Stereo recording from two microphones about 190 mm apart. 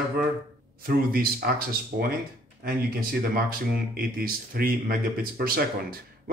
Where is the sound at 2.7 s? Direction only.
50° right (ahead or behind).